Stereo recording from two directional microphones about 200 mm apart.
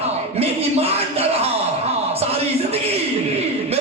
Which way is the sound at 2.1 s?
30° right (ahead or behind).